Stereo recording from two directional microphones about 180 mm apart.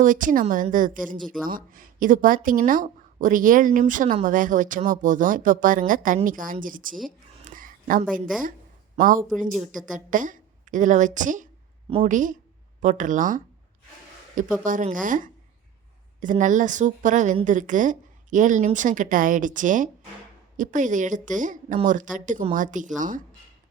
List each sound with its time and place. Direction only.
0.0 s speech: 45° right (ahead or behind)
7.4 s a sound: 50° right (ahead or behind)
9.0 s a woman's voice: 50° right (ahead or behind)
14.6 s speech: 45° right (ahead or behind)